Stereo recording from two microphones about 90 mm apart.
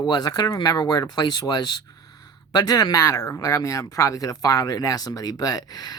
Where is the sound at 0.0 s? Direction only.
50° left (ahead or behind).